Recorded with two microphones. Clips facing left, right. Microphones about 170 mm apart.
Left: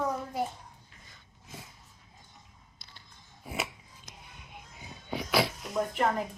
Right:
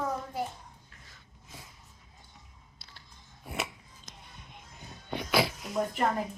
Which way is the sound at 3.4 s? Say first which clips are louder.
Left 1 dB; centre (ahead or behind).